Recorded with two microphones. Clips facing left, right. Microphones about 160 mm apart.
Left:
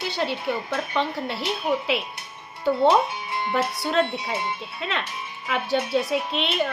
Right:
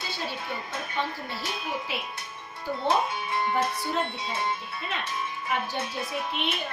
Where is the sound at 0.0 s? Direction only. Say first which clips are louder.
Left 8 dB; 70° left (ahead or behind).